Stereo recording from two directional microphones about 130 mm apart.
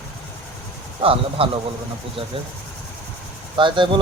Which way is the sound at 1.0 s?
45° right (ahead or behind).